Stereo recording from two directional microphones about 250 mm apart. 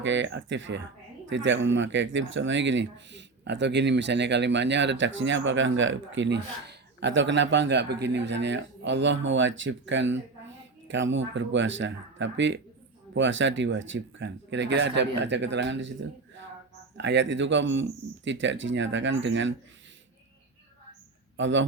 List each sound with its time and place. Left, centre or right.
0.0 s speech: right
17.0 s speech: right
21.3 s a man's voice: right